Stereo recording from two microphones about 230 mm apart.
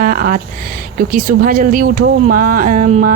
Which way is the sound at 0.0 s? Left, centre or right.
Right.